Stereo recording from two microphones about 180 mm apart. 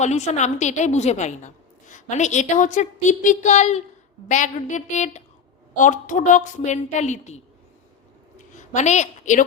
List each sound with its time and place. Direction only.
0.0 s a woman's voice: 40° left (ahead or behind)
8.5 s a woman's voice: 40° left (ahead or behind)